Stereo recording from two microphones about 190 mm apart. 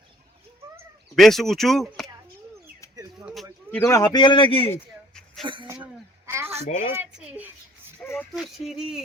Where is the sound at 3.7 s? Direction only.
15° left (ahead or behind).